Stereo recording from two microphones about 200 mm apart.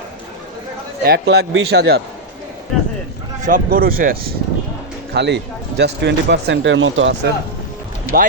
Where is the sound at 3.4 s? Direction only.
45° right (ahead or behind).